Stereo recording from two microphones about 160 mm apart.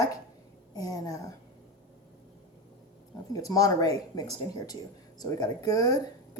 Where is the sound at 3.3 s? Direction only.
20° left (ahead or behind).